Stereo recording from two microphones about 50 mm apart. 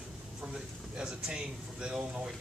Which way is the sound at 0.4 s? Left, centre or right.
Centre.